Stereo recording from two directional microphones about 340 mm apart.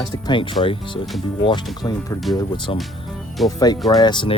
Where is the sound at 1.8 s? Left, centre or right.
Centre.